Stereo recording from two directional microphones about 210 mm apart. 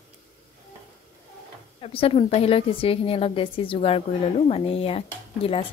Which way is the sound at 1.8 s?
25° left (ahead or behind).